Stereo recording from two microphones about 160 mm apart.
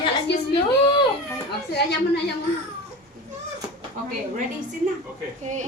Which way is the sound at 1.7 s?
90° left.